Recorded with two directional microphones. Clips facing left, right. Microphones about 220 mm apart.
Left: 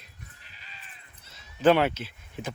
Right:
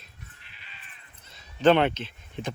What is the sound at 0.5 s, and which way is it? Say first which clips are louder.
Sheep: left 3 dB; 40° left (ahead or behind).